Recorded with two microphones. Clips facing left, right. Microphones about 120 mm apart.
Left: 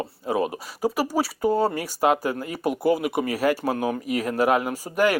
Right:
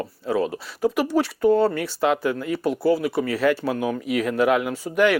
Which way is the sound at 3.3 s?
45° left (ahead or behind).